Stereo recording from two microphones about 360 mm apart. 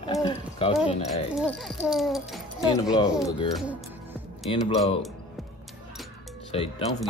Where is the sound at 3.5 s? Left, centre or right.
Centre.